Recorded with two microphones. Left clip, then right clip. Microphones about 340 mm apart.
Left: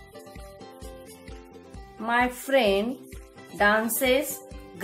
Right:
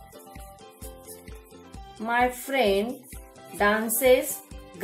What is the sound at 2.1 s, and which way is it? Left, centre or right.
Speech, left.